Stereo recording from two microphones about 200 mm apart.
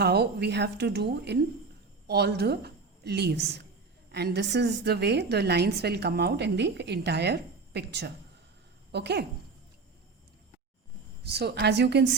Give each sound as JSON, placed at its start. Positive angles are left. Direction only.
{"t": 0.0, "sound": "a woman's voice", "side_deg": -55}
{"t": 11.2, "sound": "a woman's voice", "side_deg": -55}